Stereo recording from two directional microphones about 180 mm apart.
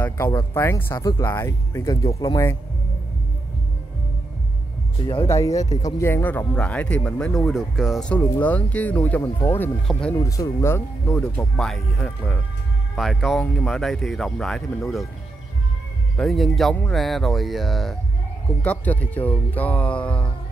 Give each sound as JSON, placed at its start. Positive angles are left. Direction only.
{"t": 0.0, "sound": "speech", "side_deg": 10}
{"t": 5.0, "sound": "speech", "side_deg": 30}
{"t": 5.3, "sound": "speech", "side_deg": 20}
{"t": 10.1, "sound": "speech", "side_deg": 20}
{"t": 16.2, "sound": "speech", "side_deg": 0}